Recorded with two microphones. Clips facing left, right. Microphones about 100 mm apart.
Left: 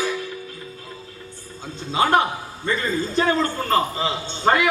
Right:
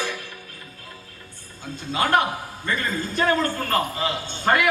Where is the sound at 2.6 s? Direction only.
20° left (ahead or behind).